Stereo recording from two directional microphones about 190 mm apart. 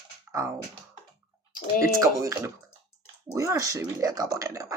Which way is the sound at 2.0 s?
15° right (ahead or behind).